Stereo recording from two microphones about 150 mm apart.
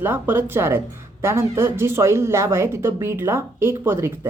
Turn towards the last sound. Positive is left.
turn(degrees=-15)  # may be behind; listen again after turning